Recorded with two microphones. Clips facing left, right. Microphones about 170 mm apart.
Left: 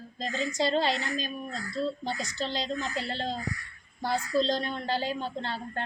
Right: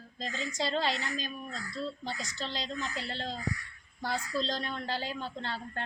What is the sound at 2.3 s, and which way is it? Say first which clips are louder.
A woman's voice: left 6 dB; 30° left (ahead or behind).